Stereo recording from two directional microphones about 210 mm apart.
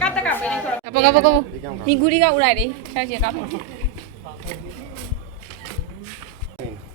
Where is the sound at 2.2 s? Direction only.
90° right.